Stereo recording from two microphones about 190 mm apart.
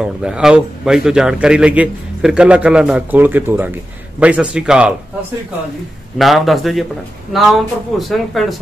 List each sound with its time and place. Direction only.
0.0 s a man's voice: 5° right (ahead or behind)
6.1 s a man's voice: centre (ahead or behind)